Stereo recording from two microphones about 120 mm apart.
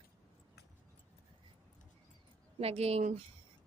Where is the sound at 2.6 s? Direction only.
60° right (ahead or behind).